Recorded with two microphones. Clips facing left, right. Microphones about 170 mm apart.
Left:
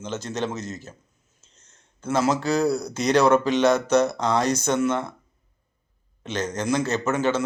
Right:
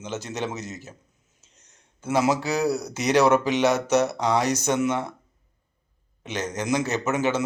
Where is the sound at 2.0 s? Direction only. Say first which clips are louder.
Even; 15° right (ahead or behind).